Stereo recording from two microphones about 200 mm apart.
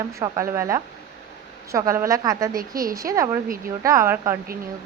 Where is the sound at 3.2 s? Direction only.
15° right (ahead or behind).